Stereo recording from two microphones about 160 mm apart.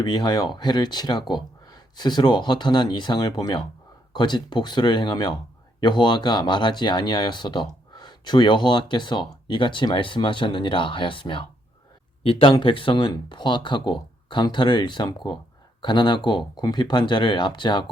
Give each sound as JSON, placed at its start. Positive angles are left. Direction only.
{"t": 0.0, "sound": "speech", "side_deg": 25}